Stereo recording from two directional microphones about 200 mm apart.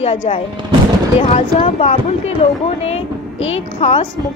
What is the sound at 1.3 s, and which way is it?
A woman's voice, 30° left (ahead or behind).